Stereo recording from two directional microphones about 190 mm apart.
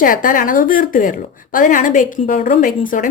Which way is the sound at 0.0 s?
45° left (ahead or behind).